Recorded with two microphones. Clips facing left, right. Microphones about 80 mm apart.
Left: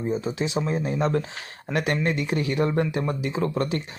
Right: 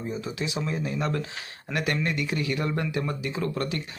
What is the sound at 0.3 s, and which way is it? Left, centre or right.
Speech, left.